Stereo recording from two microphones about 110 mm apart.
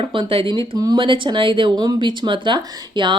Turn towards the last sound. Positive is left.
turn(degrees=-45)  # may be behind; listen again after turning